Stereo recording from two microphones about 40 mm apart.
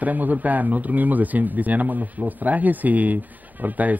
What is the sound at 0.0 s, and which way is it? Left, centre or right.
Speech, right.